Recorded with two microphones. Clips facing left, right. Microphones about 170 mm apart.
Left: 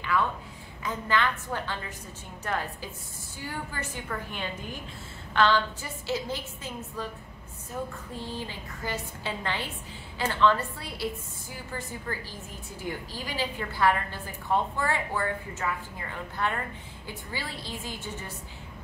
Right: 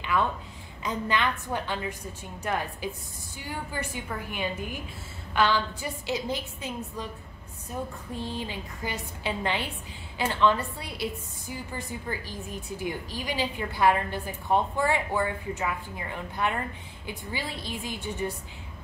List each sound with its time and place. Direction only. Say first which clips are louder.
0.8 s a woman's voice: even; 20° right (ahead or behind)
8.2 s a woman's voice: right 3 dB; 15° right (ahead or behind)